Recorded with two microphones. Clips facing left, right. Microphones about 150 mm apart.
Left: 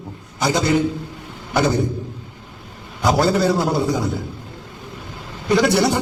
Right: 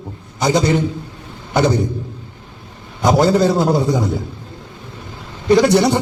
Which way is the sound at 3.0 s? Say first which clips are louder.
Right 4 dB; 20° right (ahead or behind).